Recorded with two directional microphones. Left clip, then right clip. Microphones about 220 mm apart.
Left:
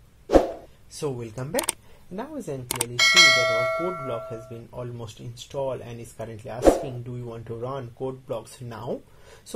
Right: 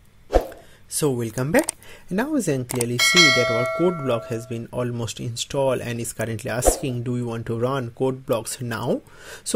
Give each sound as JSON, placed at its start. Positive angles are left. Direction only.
{"t": 0.3, "sound": "a sound", "side_deg": 0}
{"t": 0.9, "sound": "speech", "side_deg": -40}
{"t": 2.7, "sound": "speech", "side_deg": 0}
{"t": 4.1, "sound": "speech", "side_deg": -45}